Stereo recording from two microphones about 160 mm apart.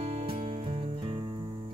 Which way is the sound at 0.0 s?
35° right (ahead or behind).